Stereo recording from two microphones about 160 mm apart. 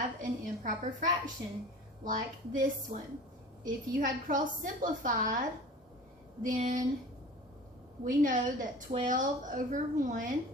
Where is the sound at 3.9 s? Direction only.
55° right (ahead or behind).